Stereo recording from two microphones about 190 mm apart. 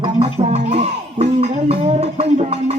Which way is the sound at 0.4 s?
35° right (ahead or behind).